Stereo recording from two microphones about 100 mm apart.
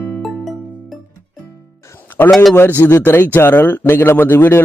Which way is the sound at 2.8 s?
25° left (ahead or behind).